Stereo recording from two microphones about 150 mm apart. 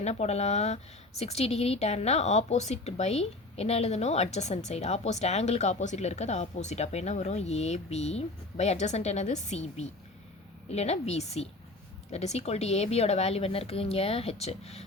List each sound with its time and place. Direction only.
0.0 s a woman's voice: 45° left (ahead or behind)